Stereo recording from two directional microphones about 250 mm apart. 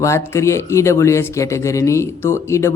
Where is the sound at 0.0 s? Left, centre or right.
Centre.